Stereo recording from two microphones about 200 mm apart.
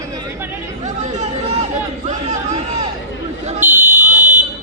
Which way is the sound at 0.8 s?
35° right (ahead or behind).